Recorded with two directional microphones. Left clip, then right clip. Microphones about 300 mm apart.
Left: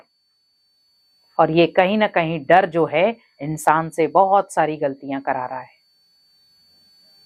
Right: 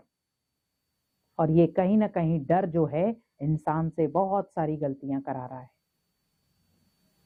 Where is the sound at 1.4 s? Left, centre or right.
Centre.